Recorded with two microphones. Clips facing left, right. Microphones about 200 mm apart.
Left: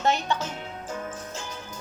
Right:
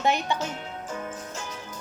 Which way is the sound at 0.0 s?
15° right (ahead or behind).